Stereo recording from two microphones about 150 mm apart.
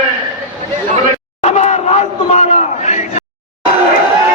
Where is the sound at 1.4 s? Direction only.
50° left (ahead or behind).